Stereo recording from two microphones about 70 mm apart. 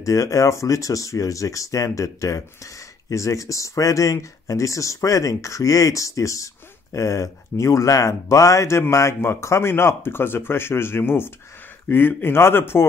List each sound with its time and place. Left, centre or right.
0.0 s a man's voice: left